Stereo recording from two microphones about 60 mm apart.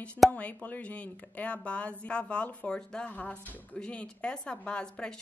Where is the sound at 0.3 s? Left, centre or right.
Left.